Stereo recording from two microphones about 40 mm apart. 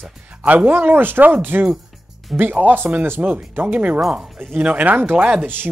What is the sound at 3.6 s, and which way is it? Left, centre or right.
Speech, right.